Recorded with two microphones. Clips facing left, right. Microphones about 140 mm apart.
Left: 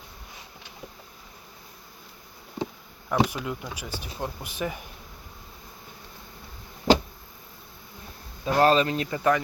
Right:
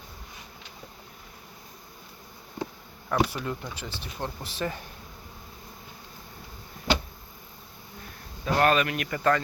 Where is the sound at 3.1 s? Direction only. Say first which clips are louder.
Left 1 dB; 15° left (ahead or behind).